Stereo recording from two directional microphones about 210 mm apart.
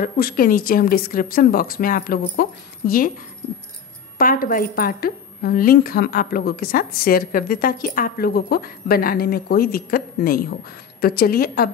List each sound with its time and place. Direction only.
0.0 s a woman's voice: 45° left (ahead or behind)
4.2 s a woman's voice: 40° left (ahead or behind)